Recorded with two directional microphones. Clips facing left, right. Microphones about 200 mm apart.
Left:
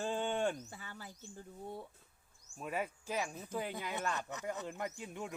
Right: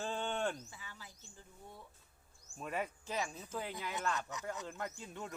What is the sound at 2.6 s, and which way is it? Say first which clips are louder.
Speech: left 1 dB; 5° left (ahead or behind).